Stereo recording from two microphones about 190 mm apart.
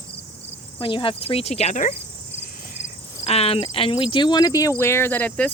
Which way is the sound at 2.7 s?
35° left (ahead or behind).